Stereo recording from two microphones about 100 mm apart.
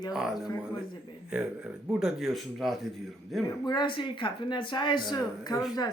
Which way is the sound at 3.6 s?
50° left (ahead or behind).